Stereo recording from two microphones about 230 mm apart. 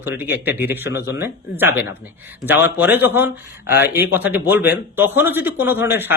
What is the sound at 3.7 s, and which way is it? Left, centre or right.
Speech, left.